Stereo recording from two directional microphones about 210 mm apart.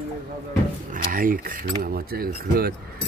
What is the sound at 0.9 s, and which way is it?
Speech, 40° right (ahead or behind).